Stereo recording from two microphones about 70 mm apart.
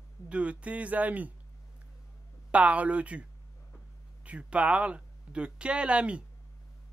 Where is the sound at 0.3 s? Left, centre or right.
Centre.